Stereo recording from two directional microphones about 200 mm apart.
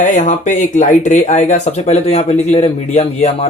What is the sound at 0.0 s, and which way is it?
A man's voice, 40° left (ahead or behind).